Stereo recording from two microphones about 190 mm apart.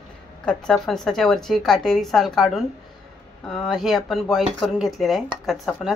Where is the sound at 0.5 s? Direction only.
5° left (ahead or behind).